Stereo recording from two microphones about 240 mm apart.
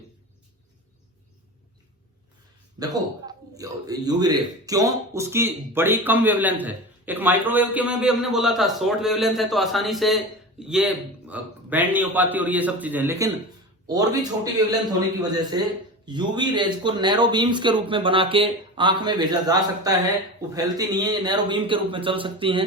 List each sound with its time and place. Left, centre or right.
2.7 s a man's voice: centre